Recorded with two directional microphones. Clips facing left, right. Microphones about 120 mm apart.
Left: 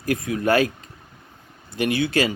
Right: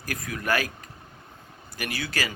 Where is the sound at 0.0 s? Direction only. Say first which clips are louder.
Left 10 dB; 25° left (ahead or behind).